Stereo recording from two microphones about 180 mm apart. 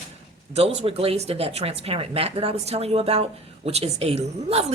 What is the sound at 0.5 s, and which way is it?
Speech, 35° right (ahead or behind).